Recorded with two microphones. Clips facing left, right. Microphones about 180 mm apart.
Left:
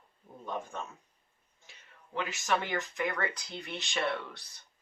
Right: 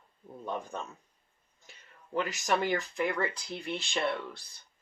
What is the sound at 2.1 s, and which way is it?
Speech, 35° right (ahead or behind).